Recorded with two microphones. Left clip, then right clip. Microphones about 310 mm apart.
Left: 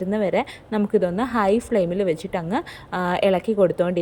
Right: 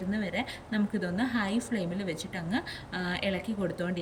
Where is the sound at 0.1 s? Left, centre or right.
Centre.